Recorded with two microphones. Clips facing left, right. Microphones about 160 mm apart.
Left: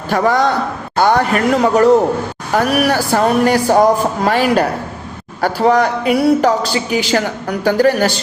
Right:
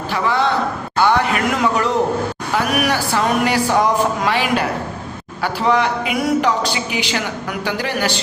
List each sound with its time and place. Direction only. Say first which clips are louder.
0.1 s speech: left 5 dB; 45° left (ahead or behind)